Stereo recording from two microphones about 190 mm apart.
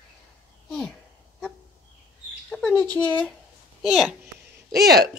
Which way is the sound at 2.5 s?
5° left (ahead or behind).